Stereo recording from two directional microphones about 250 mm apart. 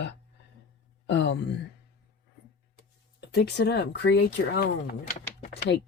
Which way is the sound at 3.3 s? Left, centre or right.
Left.